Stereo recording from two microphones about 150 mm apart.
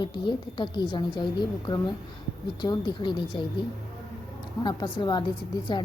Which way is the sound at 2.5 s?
30° left (ahead or behind).